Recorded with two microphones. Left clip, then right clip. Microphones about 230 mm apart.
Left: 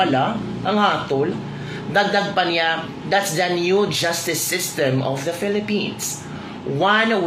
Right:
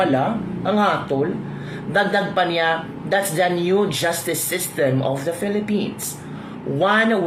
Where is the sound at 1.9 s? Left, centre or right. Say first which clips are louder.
Even; centre.